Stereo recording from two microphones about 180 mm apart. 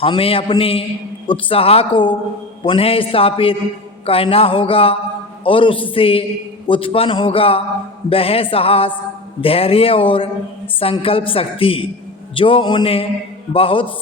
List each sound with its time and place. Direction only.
0.0 s a man's voice: 30° left (ahead or behind)